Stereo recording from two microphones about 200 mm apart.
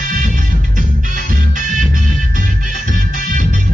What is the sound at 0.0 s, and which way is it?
Music, 40° right (ahead or behind).